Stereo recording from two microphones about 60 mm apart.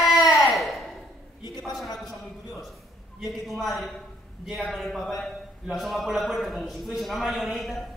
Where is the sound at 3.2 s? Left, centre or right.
Centre.